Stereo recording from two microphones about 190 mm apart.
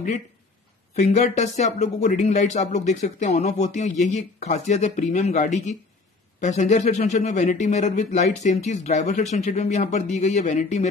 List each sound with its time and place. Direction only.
0.9 s a man's voice: 35° left (ahead or behind)